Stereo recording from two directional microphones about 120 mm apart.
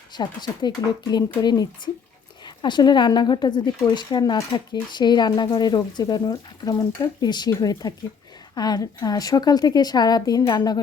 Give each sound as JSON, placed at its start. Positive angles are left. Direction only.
{"t": 0.1, "sound": "speech", "side_deg": 35}